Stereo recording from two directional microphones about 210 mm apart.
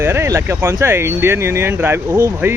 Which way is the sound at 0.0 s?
10° right (ahead or behind).